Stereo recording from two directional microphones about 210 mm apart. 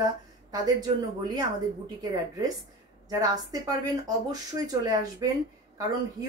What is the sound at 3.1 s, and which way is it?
Speech, 15° right (ahead or behind).